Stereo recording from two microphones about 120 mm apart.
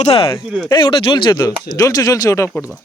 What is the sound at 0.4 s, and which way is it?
Speech, 5° right (ahead or behind).